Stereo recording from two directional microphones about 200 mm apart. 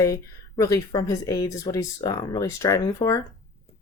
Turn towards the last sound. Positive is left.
turn(degrees=15)  # may be behind; listen again after turning